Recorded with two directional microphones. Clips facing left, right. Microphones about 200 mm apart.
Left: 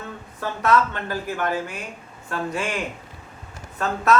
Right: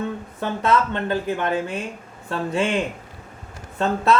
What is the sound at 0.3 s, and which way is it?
A man's voice, 25° right (ahead or behind).